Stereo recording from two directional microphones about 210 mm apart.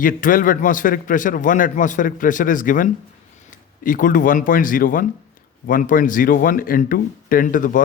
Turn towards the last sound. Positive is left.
turn(degrees=40)  # may be behind; listen again after turning